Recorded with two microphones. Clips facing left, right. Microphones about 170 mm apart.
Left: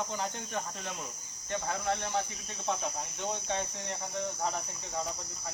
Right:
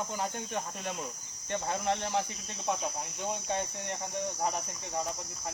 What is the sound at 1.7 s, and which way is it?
Speech, 20° right (ahead or behind).